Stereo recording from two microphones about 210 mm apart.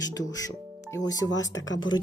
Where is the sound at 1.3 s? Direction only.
60° left (ahead or behind).